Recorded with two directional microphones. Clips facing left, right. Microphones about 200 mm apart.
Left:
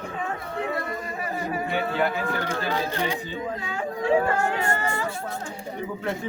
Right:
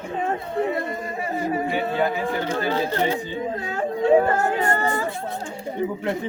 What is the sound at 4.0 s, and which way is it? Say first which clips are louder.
Speech: right 5 dB; 25° right (ahead or behind).